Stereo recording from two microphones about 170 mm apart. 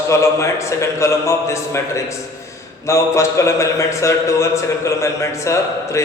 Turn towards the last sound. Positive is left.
turn(degrees=15)  # may be behind; listen again after turning